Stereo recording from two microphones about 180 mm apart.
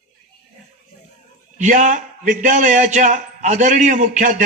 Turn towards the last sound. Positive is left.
turn(degrees=-45)  # may be behind; listen again after turning